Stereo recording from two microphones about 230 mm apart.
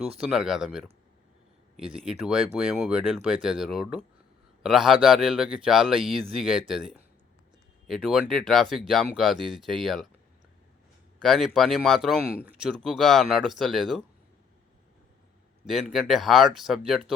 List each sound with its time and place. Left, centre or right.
0.2 s speech: centre
11.2 s speech: centre
15.6 s speech: centre